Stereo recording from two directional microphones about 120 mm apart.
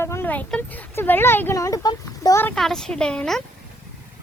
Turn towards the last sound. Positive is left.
turn(degrees=5)  # may be behind; listen again after turning